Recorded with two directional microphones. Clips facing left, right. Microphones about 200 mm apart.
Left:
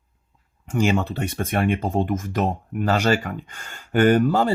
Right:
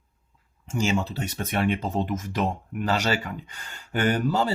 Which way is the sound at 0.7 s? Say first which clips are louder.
Left 4 dB; 55° left (ahead or behind).